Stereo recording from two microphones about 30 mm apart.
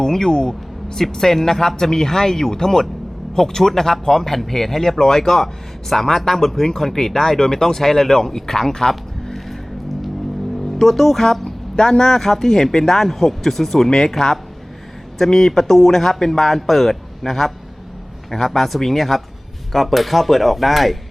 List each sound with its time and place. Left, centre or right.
0.0 s speech: left
8.9 s music: centre
10.8 s speech: centre
11.4 s speech: centre